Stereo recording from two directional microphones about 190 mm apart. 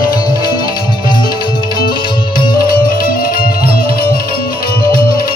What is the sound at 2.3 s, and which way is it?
Music, 50° left (ahead or behind).